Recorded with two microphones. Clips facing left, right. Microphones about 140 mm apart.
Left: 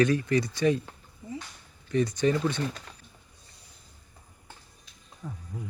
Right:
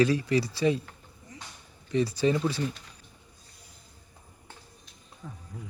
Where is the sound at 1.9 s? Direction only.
30° right (ahead or behind).